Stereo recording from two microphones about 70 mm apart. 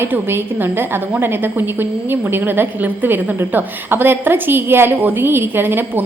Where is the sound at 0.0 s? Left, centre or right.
Right.